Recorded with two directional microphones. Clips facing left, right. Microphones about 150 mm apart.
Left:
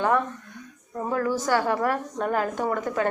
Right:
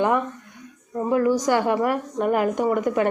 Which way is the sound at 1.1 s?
15° right (ahead or behind).